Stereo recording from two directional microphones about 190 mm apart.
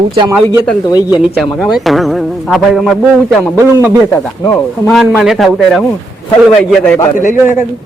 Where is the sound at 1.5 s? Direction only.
Centre (ahead or behind).